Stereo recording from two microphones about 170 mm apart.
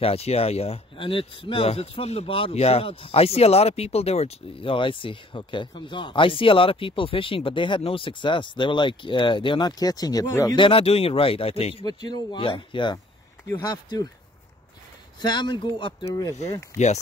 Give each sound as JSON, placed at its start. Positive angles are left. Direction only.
{"t": 0.0, "sound": "speech", "side_deg": 35}
{"t": 15.2, "sound": "speech", "side_deg": 25}
{"t": 16.7, "sound": "speech", "side_deg": 40}